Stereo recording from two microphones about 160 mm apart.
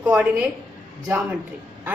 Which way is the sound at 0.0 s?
5° right (ahead or behind).